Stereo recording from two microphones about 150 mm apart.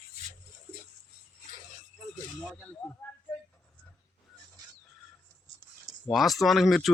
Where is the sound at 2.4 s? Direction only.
10° left (ahead or behind).